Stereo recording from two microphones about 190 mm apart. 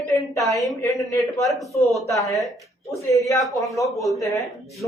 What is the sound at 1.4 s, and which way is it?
Speech, centre (ahead or behind).